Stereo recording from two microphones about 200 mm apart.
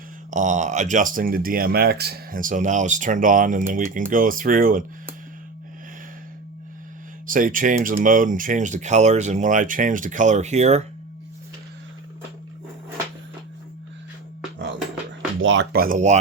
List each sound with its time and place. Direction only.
0.3 s speech: 40° right (ahead or behind)
7.3 s speech: 40° right (ahead or behind)
15.4 s speech: 70° right (ahead or behind)
15.7 s speech: 45° right (ahead or behind)